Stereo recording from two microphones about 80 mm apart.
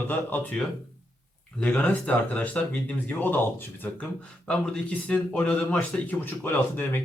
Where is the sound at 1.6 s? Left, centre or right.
Centre.